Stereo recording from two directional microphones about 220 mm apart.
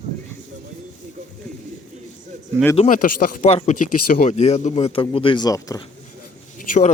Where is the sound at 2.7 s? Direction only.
35° left (ahead or behind); by 5.8 s 15° left (ahead or behind).